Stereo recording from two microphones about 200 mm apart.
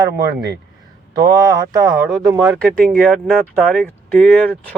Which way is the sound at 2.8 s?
Centre (ahead or behind).